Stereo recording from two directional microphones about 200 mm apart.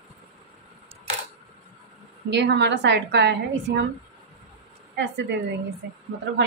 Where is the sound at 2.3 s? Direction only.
60° right (ahead or behind).